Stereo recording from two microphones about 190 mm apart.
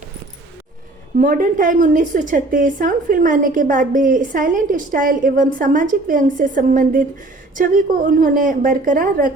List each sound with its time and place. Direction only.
1.2 s a woman's voice: 45° right (ahead or behind)